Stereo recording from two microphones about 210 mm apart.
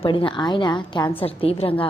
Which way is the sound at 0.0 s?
25° left (ahead or behind).